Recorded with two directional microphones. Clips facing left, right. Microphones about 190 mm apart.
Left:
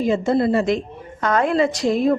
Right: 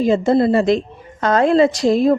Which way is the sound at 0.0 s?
35° right (ahead or behind).